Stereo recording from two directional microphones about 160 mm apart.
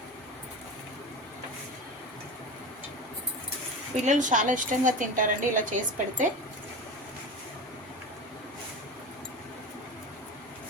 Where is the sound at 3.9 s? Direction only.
50° right (ahead or behind).